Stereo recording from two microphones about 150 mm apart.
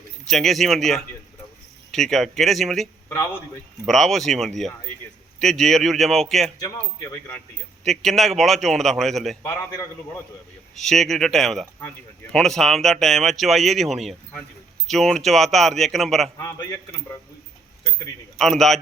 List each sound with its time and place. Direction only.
0.3 s speech: centre (ahead or behind)
6.6 s a man's voice: 20° left (ahead or behind)
7.9 s speech: centre (ahead or behind)
9.4 s a man's voice: 20° left (ahead or behind)
10.8 s speech: centre (ahead or behind)
16.4 s a man's voice: 25° left (ahead or behind)
18.3 s speech: centre (ahead or behind)